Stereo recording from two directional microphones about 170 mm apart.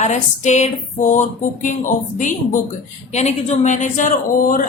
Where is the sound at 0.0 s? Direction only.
45° left (ahead or behind).